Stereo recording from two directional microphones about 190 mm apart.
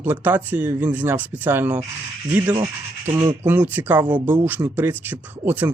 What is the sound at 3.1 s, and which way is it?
Speech, 10° right (ahead or behind).